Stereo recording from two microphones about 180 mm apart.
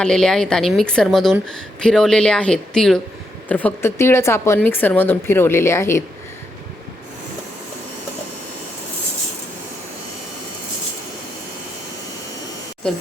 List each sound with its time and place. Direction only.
0.0 s a woman's voice: 5° left (ahead or behind)